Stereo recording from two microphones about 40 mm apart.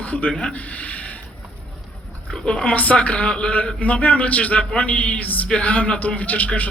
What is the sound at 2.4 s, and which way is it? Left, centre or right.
Speech, left.